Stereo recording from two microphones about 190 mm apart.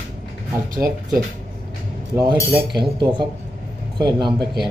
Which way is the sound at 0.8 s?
10° right (ahead or behind).